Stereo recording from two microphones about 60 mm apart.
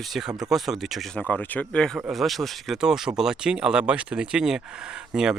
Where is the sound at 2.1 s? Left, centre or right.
Centre.